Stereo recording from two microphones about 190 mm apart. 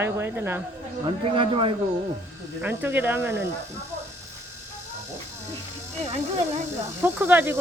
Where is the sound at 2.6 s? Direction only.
10° right (ahead or behind).